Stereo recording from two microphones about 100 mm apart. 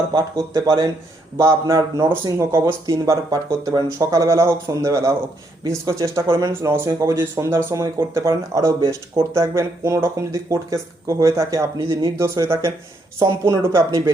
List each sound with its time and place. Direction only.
0.1 s speech: 45° right (ahead or behind)
2.0 s speech: 50° right (ahead or behind)
2.4 s speech: 25° right (ahead or behind)
2.8 s speech: 35° right (ahead or behind)
9.3 s speech: 30° right (ahead or behind)
11.9 s speech: 45° right (ahead or behind)
12.1 s speech: 25° right (ahead or behind)